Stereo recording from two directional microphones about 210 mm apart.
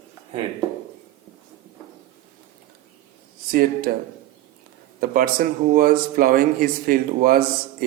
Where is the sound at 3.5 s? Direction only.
45° right (ahead or behind).